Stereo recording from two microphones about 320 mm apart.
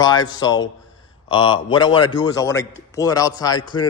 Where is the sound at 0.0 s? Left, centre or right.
Centre.